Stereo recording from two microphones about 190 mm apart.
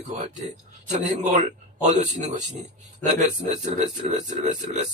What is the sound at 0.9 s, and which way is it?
A man's voice, 40° right (ahead or behind).